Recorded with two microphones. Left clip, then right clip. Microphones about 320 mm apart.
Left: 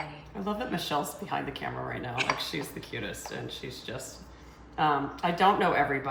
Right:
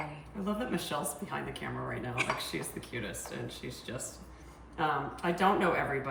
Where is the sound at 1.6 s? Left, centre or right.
Centre.